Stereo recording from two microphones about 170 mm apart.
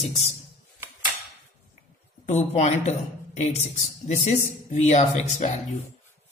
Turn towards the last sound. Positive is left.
turn(degrees=45)  # may be behind; listen again after turning